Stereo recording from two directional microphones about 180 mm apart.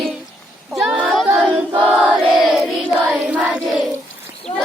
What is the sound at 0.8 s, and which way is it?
Child singing, centre (ahead or behind).